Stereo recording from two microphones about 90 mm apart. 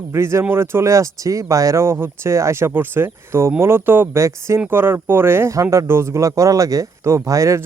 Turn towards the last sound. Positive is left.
turn(degrees=-35)  # may be behind; listen again after turning